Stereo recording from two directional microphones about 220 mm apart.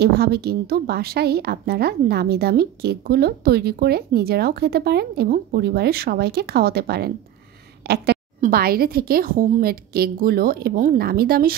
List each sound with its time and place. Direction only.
0.0 s a woman's voice: 45° right (ahead or behind)